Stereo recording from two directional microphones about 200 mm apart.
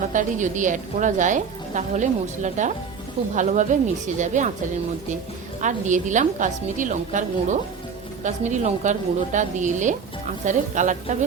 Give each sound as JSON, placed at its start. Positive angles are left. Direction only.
{"t": 0.1, "sound": "a woman's voice", "side_deg": -40}
{"t": 5.5, "sound": "a woman's voice", "side_deg": -40}